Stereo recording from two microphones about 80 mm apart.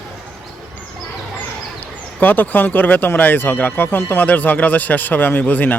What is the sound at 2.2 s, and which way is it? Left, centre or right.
Speech, left.